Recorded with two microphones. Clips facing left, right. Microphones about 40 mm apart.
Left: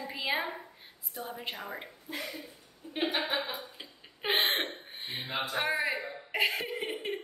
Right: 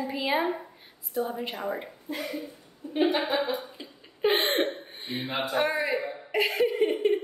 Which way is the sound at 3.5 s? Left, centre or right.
Centre.